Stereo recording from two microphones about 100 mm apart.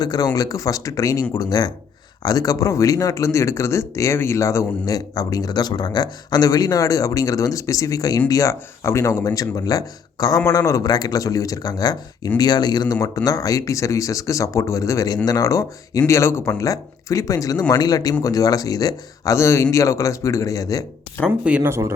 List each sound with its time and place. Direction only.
0.0 s speech: 40° left (ahead or behind)
21.2 s speech: 10° right (ahead or behind)
21.6 s speech: 25° right (ahead or behind)